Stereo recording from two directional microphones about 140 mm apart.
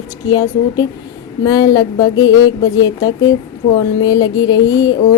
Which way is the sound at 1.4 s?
25° left (ahead or behind).